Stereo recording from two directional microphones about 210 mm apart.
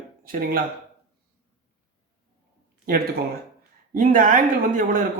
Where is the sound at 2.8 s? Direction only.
45° right (ahead or behind).